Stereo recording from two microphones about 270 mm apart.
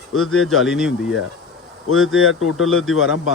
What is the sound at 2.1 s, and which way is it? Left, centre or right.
Speech, left.